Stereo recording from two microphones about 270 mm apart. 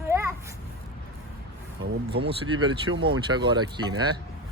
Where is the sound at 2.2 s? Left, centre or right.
Centre.